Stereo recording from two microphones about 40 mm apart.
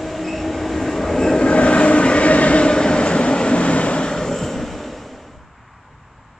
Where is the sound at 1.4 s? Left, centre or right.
Left.